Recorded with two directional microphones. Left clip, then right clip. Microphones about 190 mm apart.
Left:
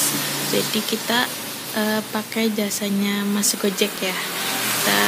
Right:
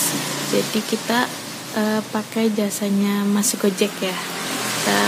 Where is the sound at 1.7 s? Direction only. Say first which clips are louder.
Right 1 dB; 5° right (ahead or behind).